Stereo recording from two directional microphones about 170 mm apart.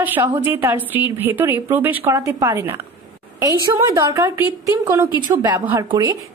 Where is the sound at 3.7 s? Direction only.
20° right (ahead or behind).